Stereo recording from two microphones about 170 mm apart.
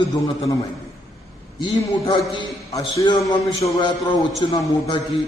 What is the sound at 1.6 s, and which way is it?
Speech, 20° left (ahead or behind).